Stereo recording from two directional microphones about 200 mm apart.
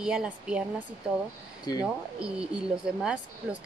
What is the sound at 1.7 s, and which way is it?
Speech, 20° left (ahead or behind).